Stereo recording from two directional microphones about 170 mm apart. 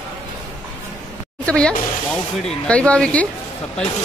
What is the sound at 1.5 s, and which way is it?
Speech, 5° left (ahead or behind).